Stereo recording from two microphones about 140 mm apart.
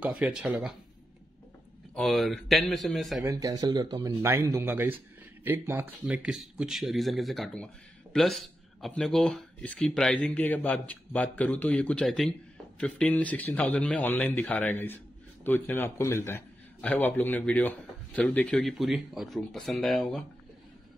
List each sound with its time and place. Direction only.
0.0 s speech: 5° right (ahead or behind)
2.0 s speech: centre (ahead or behind)
3.3 s speech: 25° right (ahead or behind)
6.0 s speech: 5° right (ahead or behind)